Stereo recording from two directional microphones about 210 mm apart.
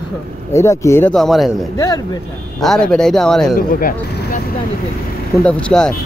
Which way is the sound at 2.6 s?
5° left (ahead or behind).